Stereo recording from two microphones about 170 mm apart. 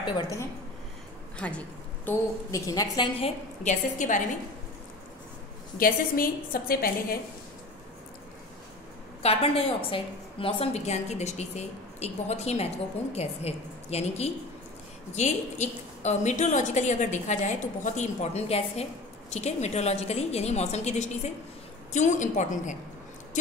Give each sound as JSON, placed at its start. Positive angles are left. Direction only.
{"t": 0.0, "sound": "a woman's voice", "side_deg": 20}
{"t": 1.4, "sound": "a woman's voice", "side_deg": 5}
{"t": 2.0, "sound": "a woman's voice", "side_deg": 15}
{"t": 3.2, "sound": "a woman's voice", "side_deg": 35}
{"t": 4.0, "sound": "a woman's voice", "side_deg": 50}
{"t": 5.8, "sound": "a woman's voice", "side_deg": 55}
{"t": 9.2, "sound": "a woman's voice", "side_deg": 35}